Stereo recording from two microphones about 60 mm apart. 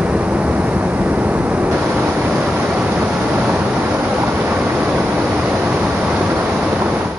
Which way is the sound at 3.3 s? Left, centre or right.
Right.